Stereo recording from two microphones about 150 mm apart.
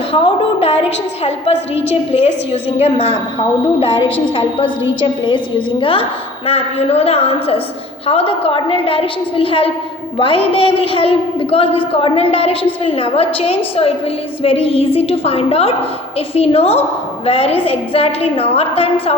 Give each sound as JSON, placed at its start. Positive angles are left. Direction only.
{"t": 0.1, "sound": "a woman's voice", "side_deg": 35}
{"t": 4.4, "sound": "a woman's voice", "side_deg": 35}